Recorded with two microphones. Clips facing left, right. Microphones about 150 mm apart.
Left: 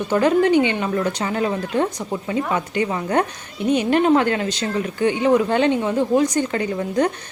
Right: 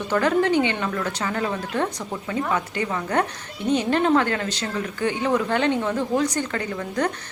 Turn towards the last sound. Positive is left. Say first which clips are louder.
# left 5 dB
turn(degrees=20)  # may be behind; listen again after turning